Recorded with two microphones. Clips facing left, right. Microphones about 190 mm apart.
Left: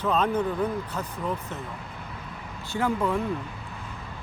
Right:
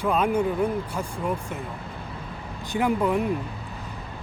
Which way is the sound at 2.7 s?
15° right (ahead or behind).